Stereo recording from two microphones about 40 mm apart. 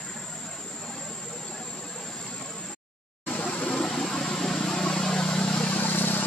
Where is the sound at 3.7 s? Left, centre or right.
Centre.